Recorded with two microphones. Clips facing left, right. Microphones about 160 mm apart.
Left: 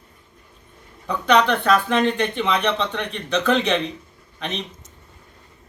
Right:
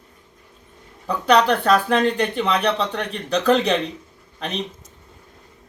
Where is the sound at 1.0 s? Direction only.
35° right (ahead or behind).